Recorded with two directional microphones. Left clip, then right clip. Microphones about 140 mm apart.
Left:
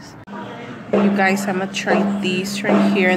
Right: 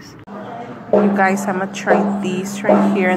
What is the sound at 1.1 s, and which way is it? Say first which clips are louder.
Speech: right 2 dB; 15° left (ahead or behind).